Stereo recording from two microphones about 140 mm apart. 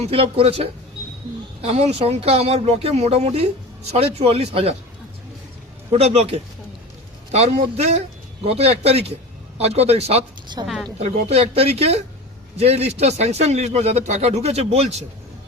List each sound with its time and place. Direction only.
0.1 s speech: 45° right (ahead or behind)
5.9 s speech: 50° right (ahead or behind)
10.6 s a woman's voice: 30° right (ahead or behind)
11.0 s speech: 50° right (ahead or behind)